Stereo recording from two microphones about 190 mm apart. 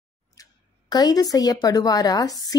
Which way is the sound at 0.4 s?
20° left (ahead or behind).